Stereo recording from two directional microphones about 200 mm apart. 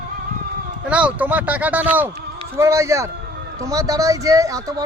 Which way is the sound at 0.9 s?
5° right (ahead or behind).